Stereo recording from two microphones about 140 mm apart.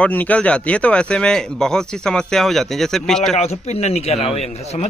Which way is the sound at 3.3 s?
50° left (ahead or behind).